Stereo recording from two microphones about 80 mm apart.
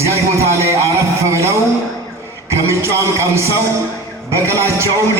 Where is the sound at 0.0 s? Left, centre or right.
Right.